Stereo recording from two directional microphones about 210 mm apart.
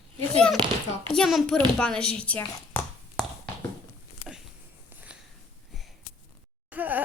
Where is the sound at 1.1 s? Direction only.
Centre (ahead or behind).